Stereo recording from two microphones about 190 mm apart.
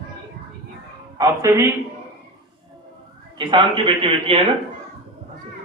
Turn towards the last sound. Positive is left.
turn(degrees=-30)  # may be behind; listen again after turning